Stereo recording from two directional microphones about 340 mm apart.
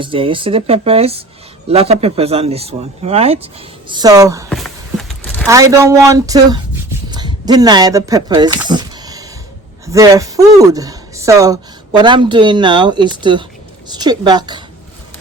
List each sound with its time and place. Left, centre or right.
0.0 s speech: centre
4.4 s walk: centre
5.5 s speech: centre